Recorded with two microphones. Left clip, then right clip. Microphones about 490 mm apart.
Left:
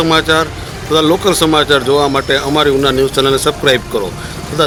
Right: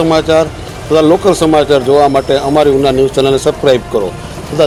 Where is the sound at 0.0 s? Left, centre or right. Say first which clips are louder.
Right 2 dB; left.